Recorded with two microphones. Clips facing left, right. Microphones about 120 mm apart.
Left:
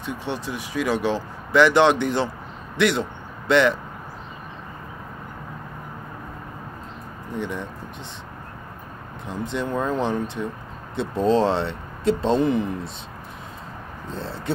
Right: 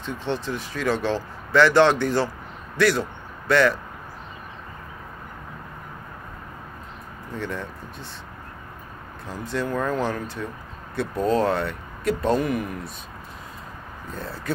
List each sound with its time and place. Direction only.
0.0 s speech: 15° left (ahead or behind)
7.3 s speech: 15° left (ahead or behind)
9.3 s speech: 20° left (ahead or behind)
14.1 s speech: 25° left (ahead or behind)